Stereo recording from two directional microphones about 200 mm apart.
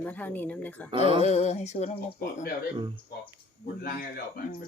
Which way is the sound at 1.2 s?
35° left (ahead or behind).